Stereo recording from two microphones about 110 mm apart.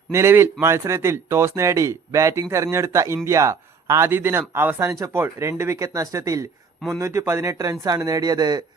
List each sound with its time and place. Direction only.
0.1 s speech: 25° right (ahead or behind)